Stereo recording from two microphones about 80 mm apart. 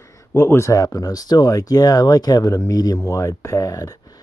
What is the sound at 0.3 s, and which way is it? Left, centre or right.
Speech, left.